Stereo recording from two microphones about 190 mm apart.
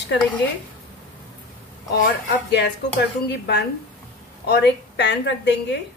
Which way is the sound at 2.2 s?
65° left (ahead or behind).